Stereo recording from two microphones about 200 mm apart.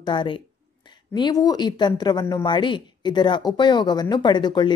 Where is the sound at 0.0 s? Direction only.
25° left (ahead or behind).